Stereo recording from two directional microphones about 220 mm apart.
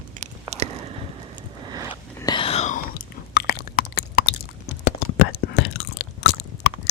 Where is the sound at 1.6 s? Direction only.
15° right (ahead or behind).